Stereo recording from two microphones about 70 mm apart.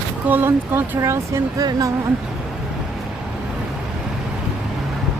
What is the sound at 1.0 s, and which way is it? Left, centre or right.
Speech, right.